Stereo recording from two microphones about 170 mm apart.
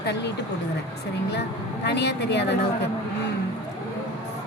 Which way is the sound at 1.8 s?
80° left.